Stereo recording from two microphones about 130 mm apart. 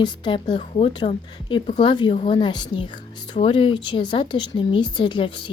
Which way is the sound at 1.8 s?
35° left (ahead or behind).